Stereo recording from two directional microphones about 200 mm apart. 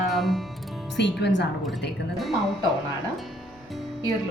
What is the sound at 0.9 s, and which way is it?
Speech, 60° left (ahead or behind).